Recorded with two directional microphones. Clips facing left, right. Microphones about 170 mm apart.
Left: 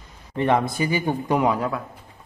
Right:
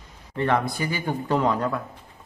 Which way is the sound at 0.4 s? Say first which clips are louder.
Left 3 dB; 20° left (ahead or behind).